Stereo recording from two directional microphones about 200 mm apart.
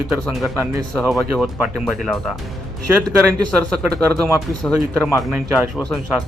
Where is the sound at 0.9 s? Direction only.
Centre (ahead or behind).